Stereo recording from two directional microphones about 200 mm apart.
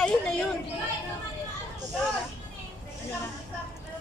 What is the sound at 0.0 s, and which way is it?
Chatter, 5° left (ahead or behind).